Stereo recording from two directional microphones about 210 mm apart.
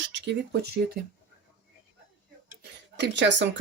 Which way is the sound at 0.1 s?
55° right (ahead or behind).